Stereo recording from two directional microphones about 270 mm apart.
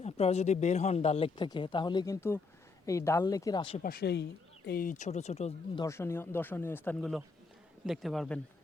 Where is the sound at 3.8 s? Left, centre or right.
Left.